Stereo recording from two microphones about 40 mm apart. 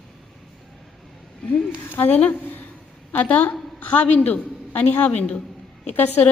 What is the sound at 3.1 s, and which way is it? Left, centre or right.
Speech, left.